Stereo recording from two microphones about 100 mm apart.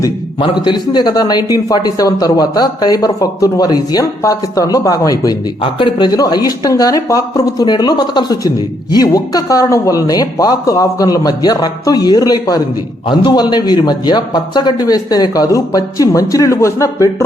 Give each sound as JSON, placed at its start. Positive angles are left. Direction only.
{"t": 0.3, "sound": "a man's voice", "side_deg": 50}